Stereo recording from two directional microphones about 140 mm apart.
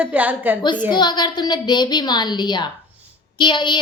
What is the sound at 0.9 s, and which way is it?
A woman's voice, 30° left (ahead or behind).